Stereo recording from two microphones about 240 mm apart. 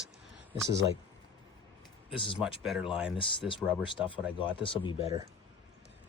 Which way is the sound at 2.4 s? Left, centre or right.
Centre.